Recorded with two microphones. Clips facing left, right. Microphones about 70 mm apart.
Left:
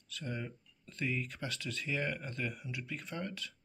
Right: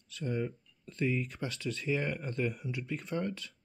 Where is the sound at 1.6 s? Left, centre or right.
Right.